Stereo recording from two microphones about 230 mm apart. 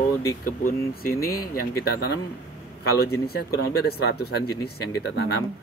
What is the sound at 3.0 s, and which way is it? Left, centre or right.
Speech, left.